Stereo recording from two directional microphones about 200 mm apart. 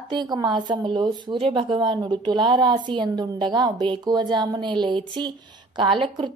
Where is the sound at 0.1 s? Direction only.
20° right (ahead or behind).